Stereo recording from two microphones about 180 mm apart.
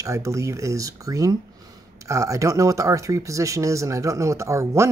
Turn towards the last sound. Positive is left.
turn(degrees=-15)  # may be behind; listen again after turning